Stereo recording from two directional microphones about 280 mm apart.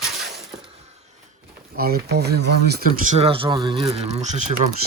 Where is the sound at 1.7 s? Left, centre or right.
Right.